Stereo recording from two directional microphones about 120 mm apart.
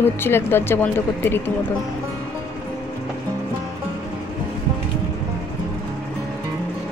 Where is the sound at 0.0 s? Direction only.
20° left (ahead or behind).